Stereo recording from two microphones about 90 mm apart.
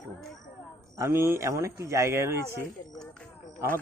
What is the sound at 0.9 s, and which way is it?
Speech, 30° right (ahead or behind).